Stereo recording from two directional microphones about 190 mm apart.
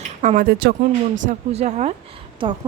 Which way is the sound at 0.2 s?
45° right (ahead or behind).